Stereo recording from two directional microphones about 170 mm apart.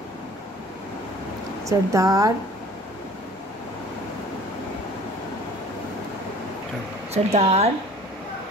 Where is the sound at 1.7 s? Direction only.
20° right (ahead or behind).